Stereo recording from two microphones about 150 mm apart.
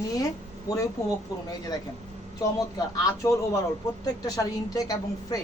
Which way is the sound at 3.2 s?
25° left (ahead or behind).